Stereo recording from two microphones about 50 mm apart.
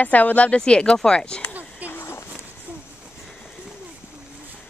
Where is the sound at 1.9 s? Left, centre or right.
Left.